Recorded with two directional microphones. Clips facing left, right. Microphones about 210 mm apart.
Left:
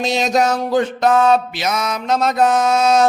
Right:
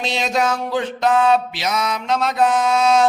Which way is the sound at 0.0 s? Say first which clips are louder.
Left 4 dB; 40° left (ahead or behind).